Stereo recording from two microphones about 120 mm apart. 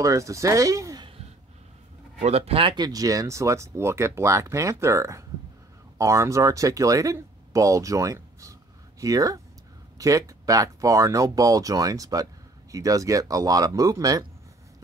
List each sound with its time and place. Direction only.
0.0 s speech: 25° right (ahead or behind)
2.2 s speech: 60° right (ahead or behind); by 14.2 s 30° right (ahead or behind)